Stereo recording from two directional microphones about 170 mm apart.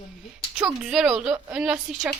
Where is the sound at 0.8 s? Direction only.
5° right (ahead or behind).